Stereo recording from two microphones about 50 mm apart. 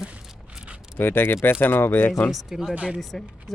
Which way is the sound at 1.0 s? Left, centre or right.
Left.